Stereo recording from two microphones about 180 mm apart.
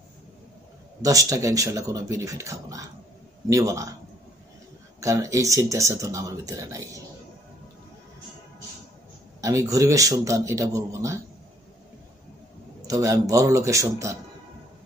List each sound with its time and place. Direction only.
1.0 s speech: 20° right (ahead or behind)
5.0 s speech: 20° right (ahead or behind)
9.4 s speech: 20° right (ahead or behind)
12.8 s speech: 15° right (ahead or behind)